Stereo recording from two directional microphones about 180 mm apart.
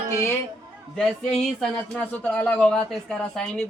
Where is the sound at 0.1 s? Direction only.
15° left (ahead or behind).